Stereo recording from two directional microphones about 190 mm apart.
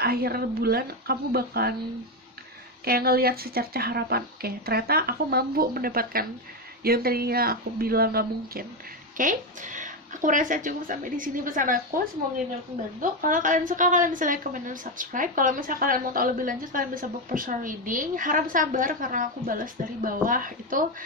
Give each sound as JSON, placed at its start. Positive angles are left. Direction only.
{"t": 0.0, "sound": "a woman's voice", "side_deg": -55}
{"t": 2.8, "sound": "a woman's voice", "side_deg": -55}